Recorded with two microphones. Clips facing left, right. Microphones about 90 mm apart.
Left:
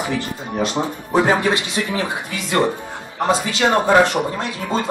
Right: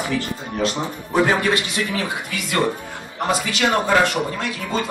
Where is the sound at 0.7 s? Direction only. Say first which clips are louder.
Left 3 dB; 25° left (ahead or behind).